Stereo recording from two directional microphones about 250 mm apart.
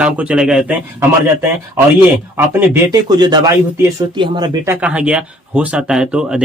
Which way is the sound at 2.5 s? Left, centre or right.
Centre.